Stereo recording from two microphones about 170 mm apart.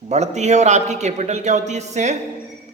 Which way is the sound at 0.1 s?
40° right (ahead or behind).